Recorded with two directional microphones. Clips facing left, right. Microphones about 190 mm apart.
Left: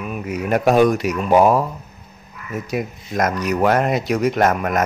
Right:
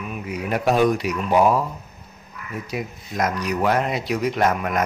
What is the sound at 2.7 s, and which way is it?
Speech, 50° left (ahead or behind).